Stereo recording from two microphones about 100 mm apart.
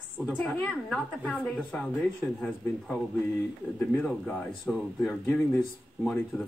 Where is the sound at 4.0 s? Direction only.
10° left (ahead or behind).